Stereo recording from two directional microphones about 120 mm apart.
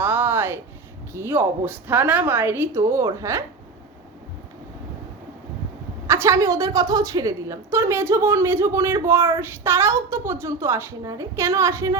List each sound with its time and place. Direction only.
0.0 s a sound: 15° right (ahead or behind)
1.1 s a woman's voice: 20° right (ahead or behind)
6.1 s a woman's voice: 25° right (ahead or behind)